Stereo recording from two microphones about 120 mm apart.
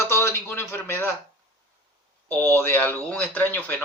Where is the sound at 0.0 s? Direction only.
20° left (ahead or behind).